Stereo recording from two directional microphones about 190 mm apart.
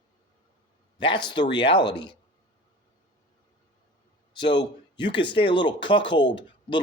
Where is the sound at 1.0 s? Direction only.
25° left (ahead or behind).